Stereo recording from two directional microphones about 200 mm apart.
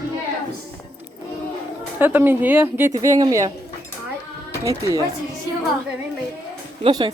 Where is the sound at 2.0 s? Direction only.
10° right (ahead or behind).